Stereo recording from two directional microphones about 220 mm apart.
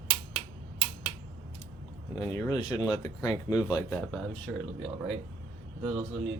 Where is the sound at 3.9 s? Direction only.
5° left (ahead or behind).